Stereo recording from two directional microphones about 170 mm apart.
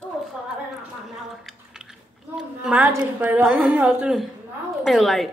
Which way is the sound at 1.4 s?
5° right (ahead or behind).